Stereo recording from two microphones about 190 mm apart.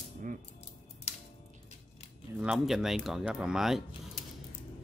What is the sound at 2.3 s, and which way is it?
Speech, 5° right (ahead or behind).